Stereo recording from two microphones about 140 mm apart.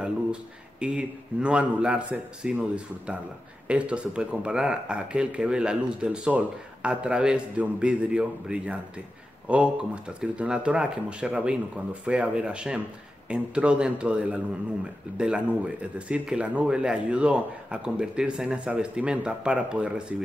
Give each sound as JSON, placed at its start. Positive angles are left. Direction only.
{"t": 0.0, "sound": "speech", "side_deg": -5}